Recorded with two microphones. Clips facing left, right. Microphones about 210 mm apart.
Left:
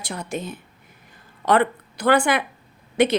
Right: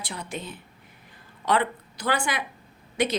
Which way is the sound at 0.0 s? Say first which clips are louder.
Left 6 dB; 45° left (ahead or behind).